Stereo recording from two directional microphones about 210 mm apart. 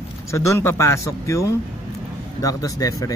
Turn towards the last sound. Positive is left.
turn(degrees=15)  # may be behind; listen again after turning